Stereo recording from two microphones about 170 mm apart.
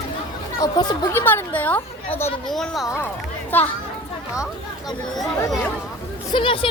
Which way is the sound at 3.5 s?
10° left (ahead or behind).